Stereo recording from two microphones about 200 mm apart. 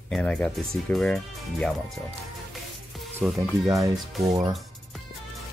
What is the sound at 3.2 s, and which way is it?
Speech, centre (ahead or behind).